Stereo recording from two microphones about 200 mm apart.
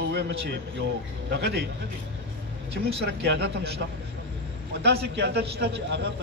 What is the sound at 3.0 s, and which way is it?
Speech, 55° right (ahead or behind).